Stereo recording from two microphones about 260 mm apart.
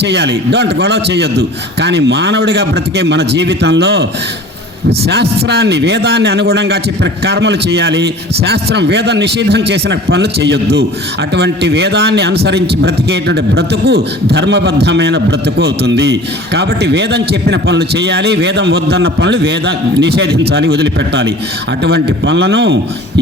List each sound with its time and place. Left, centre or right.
0.0 s speech: right